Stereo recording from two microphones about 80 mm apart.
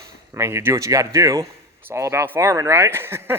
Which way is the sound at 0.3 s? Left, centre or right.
Right.